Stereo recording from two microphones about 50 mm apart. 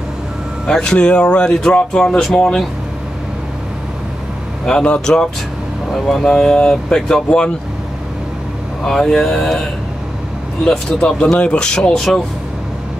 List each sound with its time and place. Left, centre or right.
0.7 s speech: centre
4.6 s speech: centre
8.8 s speech: centre